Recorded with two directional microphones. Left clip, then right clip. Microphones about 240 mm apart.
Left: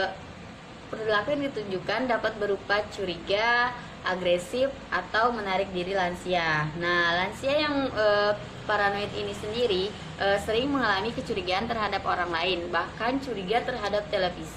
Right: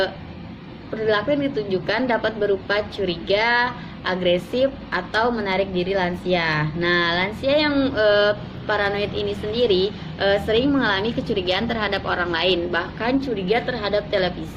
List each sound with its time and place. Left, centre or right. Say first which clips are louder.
1.0 s a woman's voice: right 6 dB; centre